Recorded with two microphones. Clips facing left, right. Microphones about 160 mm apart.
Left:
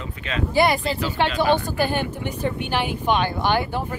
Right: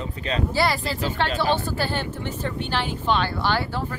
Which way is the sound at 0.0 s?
35° right (ahead or behind).